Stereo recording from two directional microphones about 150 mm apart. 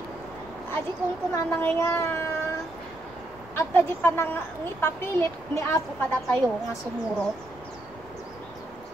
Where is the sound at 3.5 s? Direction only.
15° left (ahead or behind).